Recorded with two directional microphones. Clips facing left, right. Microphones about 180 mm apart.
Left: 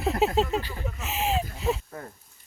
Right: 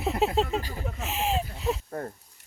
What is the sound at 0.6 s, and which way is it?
Speech, 40° right (ahead or behind).